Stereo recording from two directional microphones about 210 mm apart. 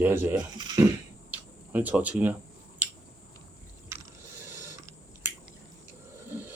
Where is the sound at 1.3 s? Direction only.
10° right (ahead or behind).